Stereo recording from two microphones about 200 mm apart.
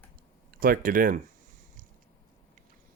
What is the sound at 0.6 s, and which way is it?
Speech, 45° right (ahead or behind).